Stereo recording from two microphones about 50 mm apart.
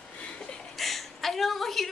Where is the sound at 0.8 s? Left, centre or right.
Centre.